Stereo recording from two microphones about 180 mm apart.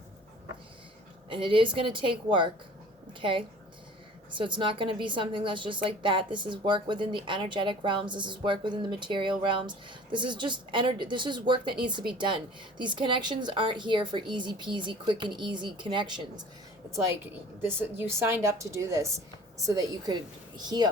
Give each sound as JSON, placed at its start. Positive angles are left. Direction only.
{"t": 1.3, "sound": "a woman's voice", "side_deg": -30}
{"t": 17.7, "sound": "a woman's voice", "side_deg": -10}